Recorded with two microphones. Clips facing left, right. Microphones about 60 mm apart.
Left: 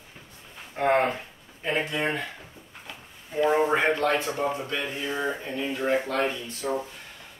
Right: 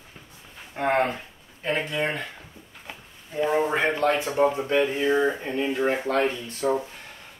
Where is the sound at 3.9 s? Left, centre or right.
Centre.